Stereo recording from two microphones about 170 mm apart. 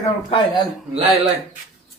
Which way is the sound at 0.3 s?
30° left (ahead or behind).